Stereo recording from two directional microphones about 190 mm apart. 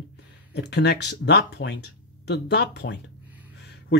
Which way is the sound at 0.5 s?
60° left (ahead or behind).